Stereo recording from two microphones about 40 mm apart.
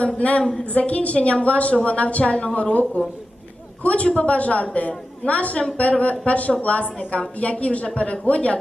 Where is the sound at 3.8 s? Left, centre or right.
Left.